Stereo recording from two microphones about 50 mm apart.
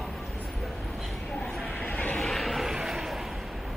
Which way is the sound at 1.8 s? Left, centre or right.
Left.